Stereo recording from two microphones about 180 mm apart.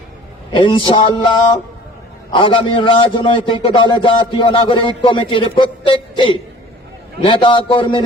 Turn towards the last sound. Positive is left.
turn(degrees=30)  # may be behind; listen again after turning